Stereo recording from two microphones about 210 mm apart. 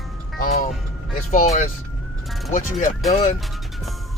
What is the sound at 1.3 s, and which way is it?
Speech, 35° left (ahead or behind).